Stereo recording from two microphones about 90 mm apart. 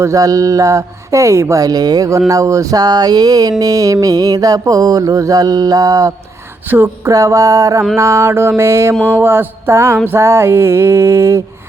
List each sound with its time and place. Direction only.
0.0 s speech: 40° right (ahead or behind)
3.6 s mantra: 40° right (ahead or behind)
6.7 s mantra: 25° right (ahead or behind)
7.1 s speech: 40° right (ahead or behind)
9.1 s mantra: 25° right (ahead or behind)